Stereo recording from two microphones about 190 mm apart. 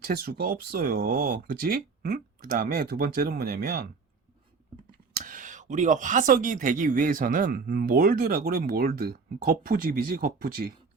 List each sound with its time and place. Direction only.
0.0 s speech: 50° right (ahead or behind)
5.1 s speech: 45° right (ahead or behind)